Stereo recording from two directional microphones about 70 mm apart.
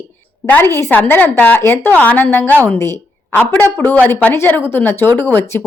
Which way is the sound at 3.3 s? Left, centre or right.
Left.